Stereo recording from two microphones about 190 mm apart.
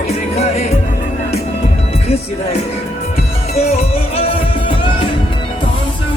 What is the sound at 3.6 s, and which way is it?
Music, 35° left (ahead or behind).